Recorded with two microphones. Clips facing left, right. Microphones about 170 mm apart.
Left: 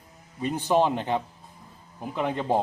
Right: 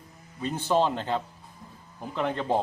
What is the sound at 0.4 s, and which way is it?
A man's voice, 15° left (ahead or behind).